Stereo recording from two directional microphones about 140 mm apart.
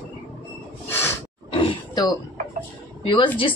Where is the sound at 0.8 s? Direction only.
15° left (ahead or behind).